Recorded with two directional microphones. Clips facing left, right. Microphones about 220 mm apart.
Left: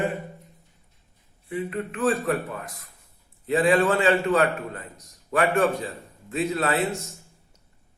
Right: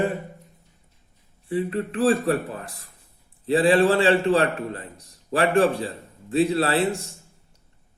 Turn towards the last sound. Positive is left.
turn(degrees=-30)  # may be behind; listen again after turning